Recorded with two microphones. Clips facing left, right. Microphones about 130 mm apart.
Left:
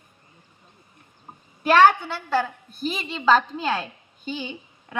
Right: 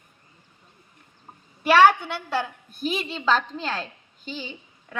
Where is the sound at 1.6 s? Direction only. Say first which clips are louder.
Even; centre (ahead or behind).